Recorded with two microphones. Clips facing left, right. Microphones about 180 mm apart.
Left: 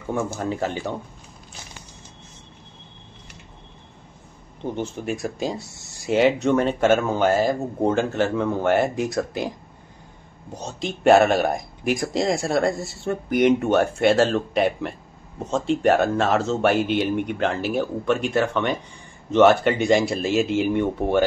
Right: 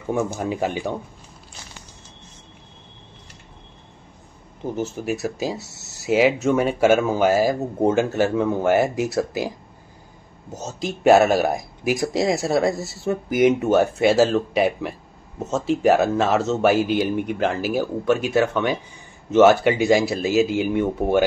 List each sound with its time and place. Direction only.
0.1 s speech: 15° right (ahead or behind)
4.6 s speech: 5° right (ahead or behind)
10.5 s speech: 5° right (ahead or behind)